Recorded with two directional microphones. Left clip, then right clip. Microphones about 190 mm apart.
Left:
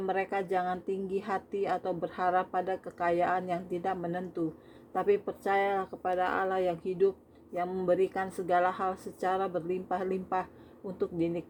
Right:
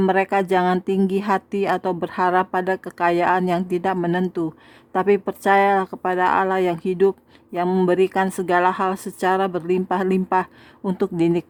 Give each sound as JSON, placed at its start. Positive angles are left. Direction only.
{"t": 0.0, "sound": "a woman's voice", "side_deg": -40}